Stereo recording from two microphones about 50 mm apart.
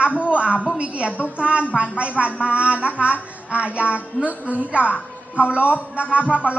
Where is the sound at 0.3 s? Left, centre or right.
Right.